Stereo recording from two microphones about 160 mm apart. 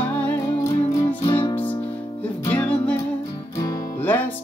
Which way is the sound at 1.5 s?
10° left (ahead or behind).